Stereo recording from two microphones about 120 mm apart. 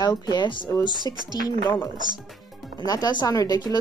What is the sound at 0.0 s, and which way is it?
Speech, 35° left (ahead or behind).